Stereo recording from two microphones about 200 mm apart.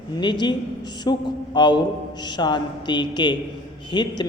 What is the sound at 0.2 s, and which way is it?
A man's voice, 20° left (ahead or behind).